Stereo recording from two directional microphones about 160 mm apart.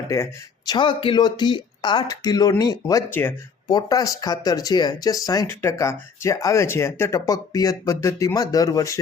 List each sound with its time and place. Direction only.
0.1 s speech: 20° left (ahead or behind)
3.7 s speech: 25° left (ahead or behind)